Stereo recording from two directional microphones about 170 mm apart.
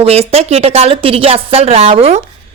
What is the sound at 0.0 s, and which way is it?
Speech, 35° right (ahead or behind).